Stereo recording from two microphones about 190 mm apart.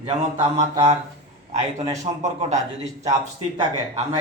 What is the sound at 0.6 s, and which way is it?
Speech, 20° right (ahead or behind).